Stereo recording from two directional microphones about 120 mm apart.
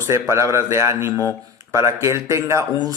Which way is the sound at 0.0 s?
25° right (ahead or behind).